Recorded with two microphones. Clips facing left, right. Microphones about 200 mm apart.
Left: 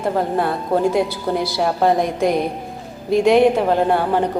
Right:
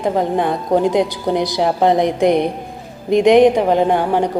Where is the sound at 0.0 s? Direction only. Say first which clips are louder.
Right 2 dB; 15° right (ahead or behind).